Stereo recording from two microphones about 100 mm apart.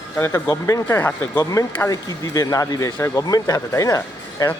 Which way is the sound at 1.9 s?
35° left (ahead or behind).